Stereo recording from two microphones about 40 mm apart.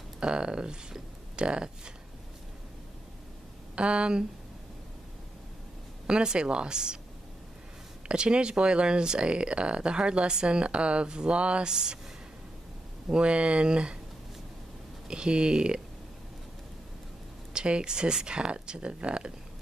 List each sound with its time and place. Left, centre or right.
0.2 s speech: right
3.7 s speech: right
6.0 s speech: right
8.1 s speech: right
11.7 s speech: centre
13.1 s speech: right
15.0 s speech: right
17.5 s speech: right